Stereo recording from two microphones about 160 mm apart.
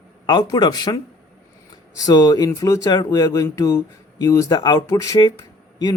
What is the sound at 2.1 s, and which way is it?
Speech, 25° left (ahead or behind).